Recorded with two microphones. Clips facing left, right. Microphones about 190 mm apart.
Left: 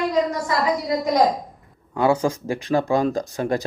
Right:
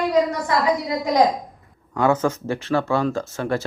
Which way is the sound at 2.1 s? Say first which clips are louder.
Even; 10° left (ahead or behind).